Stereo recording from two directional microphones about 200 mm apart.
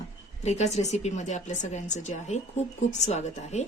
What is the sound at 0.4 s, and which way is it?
A woman's voice, 35° left (ahead or behind).